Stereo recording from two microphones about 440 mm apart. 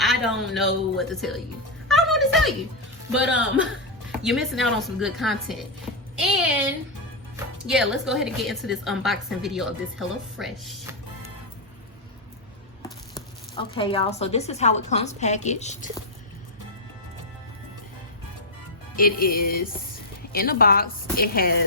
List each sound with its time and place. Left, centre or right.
0.0 s a woman's voice: centre
1.9 s a sound: centre
4.2 s a woman's voice: centre
7.7 s a woman's voice: centre
13.1 s speech: centre
18.9 s a woman's voice: centre